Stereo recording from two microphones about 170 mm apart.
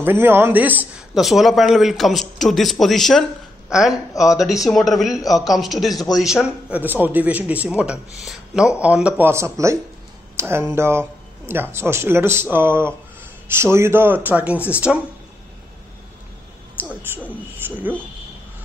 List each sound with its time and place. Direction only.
0.0 s a man's voice: 10° right (ahead or behind)
4.1 s speech: 20° left (ahead or behind)
4.6 s a man's voice: centre (ahead or behind)
16.7 s speech: 10° right (ahead or behind)